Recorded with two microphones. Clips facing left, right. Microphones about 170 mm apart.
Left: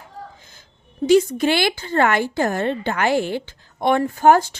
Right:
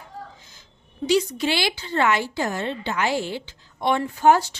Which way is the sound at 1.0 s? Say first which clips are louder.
Left 6 dB; 50° left (ahead or behind).